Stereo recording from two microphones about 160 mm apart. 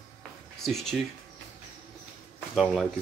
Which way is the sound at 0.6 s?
Centre (ahead or behind).